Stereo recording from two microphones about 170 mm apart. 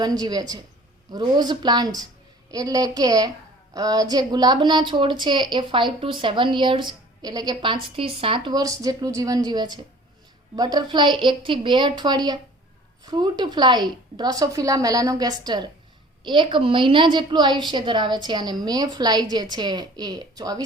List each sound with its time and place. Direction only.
0.0 s a woman's voice: 25° right (ahead or behind)